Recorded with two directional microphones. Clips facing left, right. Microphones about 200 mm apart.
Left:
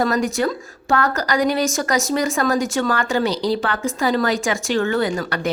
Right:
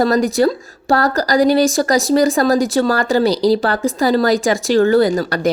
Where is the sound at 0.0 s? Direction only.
35° right (ahead or behind).